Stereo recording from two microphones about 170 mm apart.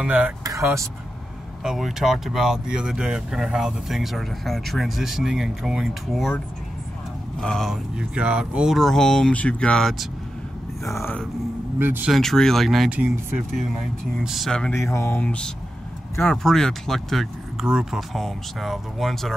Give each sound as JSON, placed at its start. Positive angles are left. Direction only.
{"t": 0.0, "sound": "speech", "side_deg": -10}
{"t": 1.6, "sound": "speech", "side_deg": 0}
{"t": 10.9, "sound": "speech", "side_deg": 15}
{"t": 11.8, "sound": "speech", "side_deg": -10}
{"t": 12.1, "sound": "speech", "side_deg": 0}
{"t": 14.8, "sound": "speech", "side_deg": 15}